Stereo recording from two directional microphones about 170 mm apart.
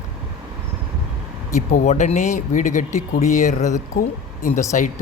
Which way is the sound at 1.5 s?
45° left (ahead or behind).